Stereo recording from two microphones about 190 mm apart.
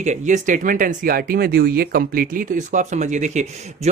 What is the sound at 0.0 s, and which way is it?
Speech, 40° right (ahead or behind).